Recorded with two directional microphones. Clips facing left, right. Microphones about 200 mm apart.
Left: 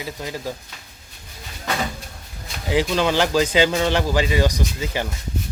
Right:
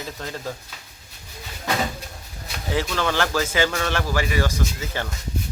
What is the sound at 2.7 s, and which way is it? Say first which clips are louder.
A man's voice: left 4 dB; 15° left (ahead or behind).